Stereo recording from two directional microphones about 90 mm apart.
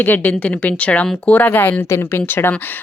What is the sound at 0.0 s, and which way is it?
A woman's voice, 20° left (ahead or behind).